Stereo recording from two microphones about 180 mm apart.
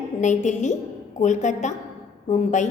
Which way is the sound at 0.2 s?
40° left (ahead or behind).